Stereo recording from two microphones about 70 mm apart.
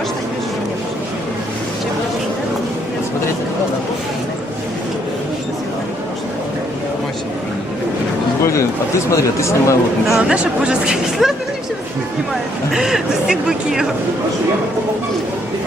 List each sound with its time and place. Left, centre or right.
9.0 s speech: left
10.1 s speech: centre